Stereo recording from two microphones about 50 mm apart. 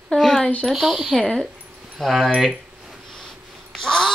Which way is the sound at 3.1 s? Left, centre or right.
Centre.